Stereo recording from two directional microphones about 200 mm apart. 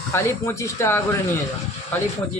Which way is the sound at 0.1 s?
15° left (ahead or behind).